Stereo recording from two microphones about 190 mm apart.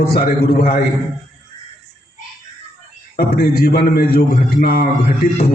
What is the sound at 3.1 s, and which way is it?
A man's voice, 55° left (ahead or behind).